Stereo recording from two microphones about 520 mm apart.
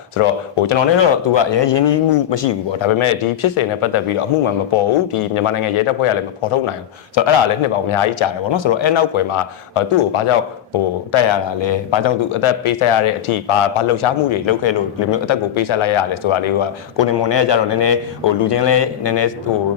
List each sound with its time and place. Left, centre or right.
0.2 s a man's voice: left
7.9 s a man's voice: left
11.1 s a man's voice: left